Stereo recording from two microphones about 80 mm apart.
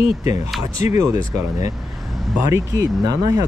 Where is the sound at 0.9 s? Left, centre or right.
Right.